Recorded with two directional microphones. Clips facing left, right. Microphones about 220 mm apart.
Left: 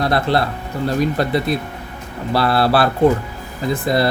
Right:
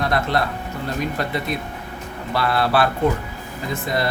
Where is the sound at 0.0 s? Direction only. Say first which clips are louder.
Left 4 dB; 35° left (ahead or behind).